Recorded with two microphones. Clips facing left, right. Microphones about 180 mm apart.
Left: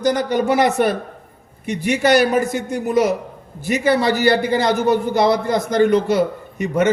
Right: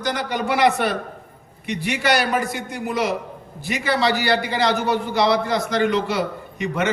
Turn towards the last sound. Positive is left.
turn(degrees=45)  # may be behind; listen again after turning